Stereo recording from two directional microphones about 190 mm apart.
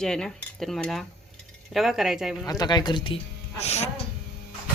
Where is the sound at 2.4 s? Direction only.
20° left (ahead or behind).